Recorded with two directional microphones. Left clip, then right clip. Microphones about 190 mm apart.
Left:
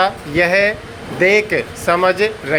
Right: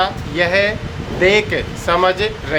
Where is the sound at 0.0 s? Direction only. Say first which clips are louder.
Left 2 dB; 25° left (ahead or behind).